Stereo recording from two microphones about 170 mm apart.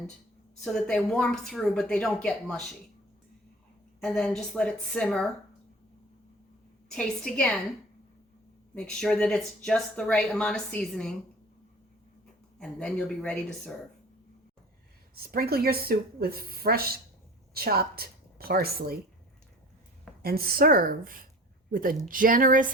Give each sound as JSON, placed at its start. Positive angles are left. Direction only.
{"t": 0.6, "sound": "speech", "side_deg": 5}
{"t": 4.0, "sound": "speech", "side_deg": 5}
{"t": 6.9, "sound": "speech", "side_deg": 5}
{"t": 8.7, "sound": "speech", "side_deg": 5}
{"t": 12.5, "sound": "speech", "side_deg": 5}
{"t": 15.3, "sound": "a woman's voice", "side_deg": -65}
{"t": 20.2, "sound": "a woman's voice", "side_deg": -60}